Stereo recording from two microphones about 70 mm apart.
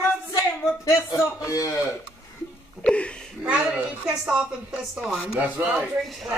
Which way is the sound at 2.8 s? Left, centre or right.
Centre.